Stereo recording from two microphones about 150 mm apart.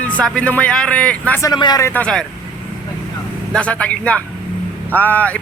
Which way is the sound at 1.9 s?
5° left (ahead or behind).